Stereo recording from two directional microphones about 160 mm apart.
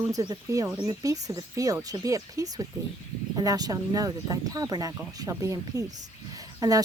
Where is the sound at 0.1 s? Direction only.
20° right (ahead or behind).